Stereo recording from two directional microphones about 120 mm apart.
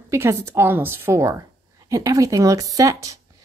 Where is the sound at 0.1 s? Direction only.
25° right (ahead or behind).